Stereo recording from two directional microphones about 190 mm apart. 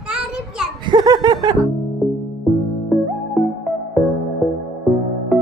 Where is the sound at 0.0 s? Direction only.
5° right (ahead or behind).